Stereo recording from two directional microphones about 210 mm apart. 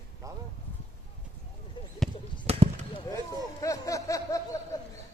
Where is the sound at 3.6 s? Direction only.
15° left (ahead or behind).